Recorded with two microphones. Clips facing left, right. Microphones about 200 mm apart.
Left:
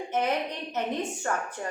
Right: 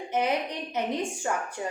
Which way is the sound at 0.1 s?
10° right (ahead or behind).